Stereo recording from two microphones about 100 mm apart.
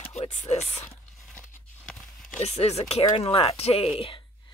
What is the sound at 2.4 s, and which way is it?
Speech, 90° left.